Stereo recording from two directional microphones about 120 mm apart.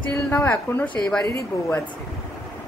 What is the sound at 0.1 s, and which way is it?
Speech, 20° left (ahead or behind).